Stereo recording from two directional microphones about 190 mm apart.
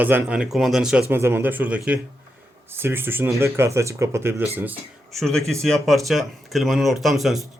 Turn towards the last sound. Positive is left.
turn(degrees=0)  # may be behind; listen again after turning